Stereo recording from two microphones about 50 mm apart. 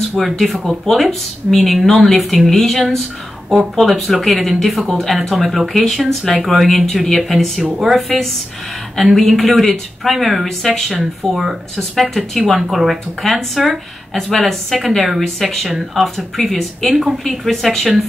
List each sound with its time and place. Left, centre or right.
0.2 s speech: centre
9.0 s speech: centre
10.9 s speech: centre
11.9 s speech: centre